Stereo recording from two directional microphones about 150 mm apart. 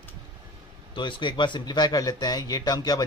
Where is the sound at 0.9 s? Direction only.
30° left (ahead or behind).